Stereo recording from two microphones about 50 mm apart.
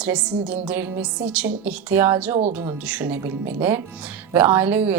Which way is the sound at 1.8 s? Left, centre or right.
Right.